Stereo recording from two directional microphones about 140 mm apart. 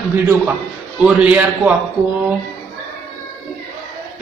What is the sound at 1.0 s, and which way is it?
Speech, 10° right (ahead or behind).